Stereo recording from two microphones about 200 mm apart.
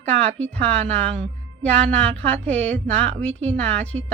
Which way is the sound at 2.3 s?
5° left (ahead or behind).